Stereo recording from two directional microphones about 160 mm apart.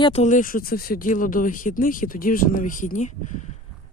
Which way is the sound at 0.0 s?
40° left (ahead or behind).